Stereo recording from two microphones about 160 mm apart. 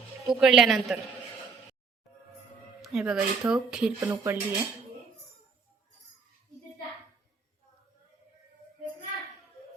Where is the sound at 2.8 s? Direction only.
5° right (ahead or behind).